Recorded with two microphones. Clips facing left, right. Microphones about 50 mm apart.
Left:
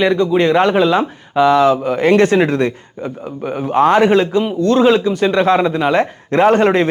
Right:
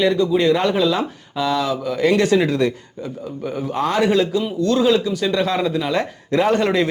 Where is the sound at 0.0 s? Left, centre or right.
Left.